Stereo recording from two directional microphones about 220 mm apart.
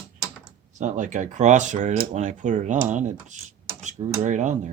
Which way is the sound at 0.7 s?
35° right (ahead or behind).